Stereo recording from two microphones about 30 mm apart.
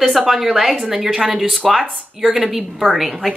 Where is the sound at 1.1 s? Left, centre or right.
Centre.